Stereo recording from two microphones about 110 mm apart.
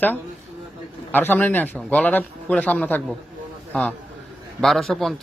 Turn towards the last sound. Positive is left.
turn(degrees=5)  # may be behind; listen again after turning